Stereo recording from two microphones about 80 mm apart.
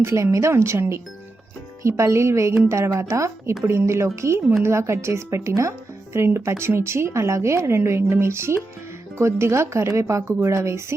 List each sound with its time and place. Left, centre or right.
0.0 s a woman's voice: right